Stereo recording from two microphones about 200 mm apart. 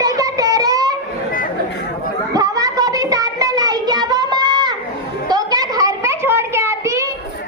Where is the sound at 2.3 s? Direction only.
15° right (ahead or behind).